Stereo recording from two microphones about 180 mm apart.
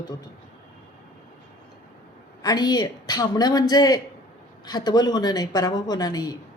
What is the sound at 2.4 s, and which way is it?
Speech, 25° left (ahead or behind).